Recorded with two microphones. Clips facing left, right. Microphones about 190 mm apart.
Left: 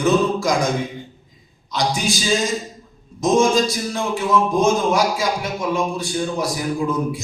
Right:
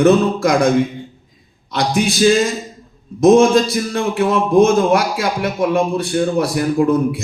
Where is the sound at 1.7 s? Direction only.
60° right (ahead or behind).